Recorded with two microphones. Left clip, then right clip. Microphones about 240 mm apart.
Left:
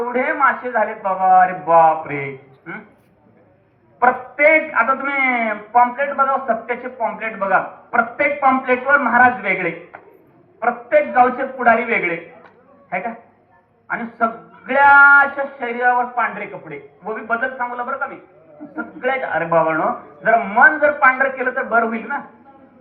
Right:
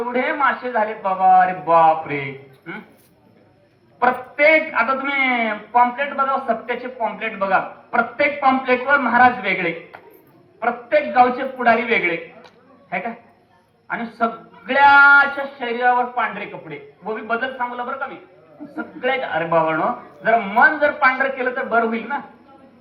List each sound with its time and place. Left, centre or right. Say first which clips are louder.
0.0 s a man's voice: left 2 dB; right
4.0 s a man's voice: left 2 dB; right